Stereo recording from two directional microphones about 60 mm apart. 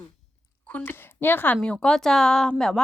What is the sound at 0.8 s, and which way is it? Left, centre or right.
Speech, left.